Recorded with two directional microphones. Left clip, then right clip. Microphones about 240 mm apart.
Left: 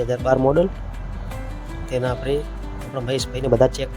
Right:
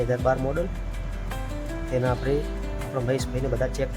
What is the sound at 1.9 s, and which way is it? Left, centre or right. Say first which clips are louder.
Speech: left 3 dB; left.